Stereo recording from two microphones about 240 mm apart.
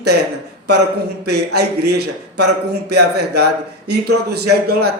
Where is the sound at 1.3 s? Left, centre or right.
Right.